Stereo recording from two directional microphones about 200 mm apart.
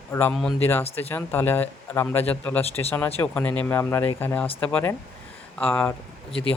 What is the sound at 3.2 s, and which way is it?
Speech, 10° left (ahead or behind).